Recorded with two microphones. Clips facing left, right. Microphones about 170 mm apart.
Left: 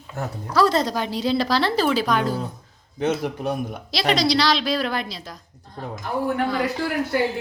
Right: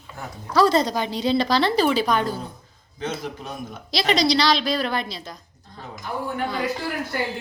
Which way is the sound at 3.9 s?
Centre (ahead or behind).